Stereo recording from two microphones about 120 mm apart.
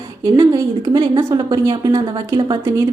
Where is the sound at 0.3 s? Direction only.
35° right (ahead or behind).